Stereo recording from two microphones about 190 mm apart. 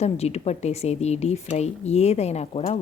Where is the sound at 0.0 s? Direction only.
35° left (ahead or behind).